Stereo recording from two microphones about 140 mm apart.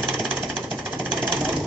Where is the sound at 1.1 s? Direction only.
5° left (ahead or behind).